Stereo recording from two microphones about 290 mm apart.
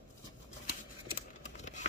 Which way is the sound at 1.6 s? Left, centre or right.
Left.